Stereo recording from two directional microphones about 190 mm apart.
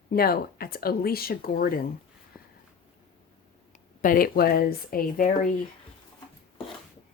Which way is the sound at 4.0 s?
50° left (ahead or behind).